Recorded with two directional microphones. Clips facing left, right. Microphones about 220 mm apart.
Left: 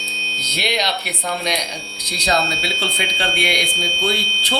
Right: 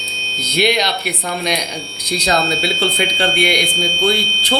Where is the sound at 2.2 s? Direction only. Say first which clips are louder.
Right 3 dB; 55° right (ahead or behind).